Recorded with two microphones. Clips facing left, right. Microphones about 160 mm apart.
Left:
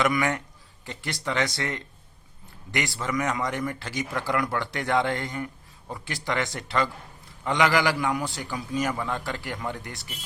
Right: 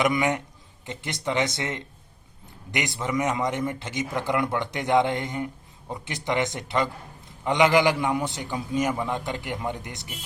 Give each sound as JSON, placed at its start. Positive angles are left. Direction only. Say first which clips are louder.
{"t": 0.0, "sound": "a man's voice", "louder": "right 1 dB", "side_deg": -20}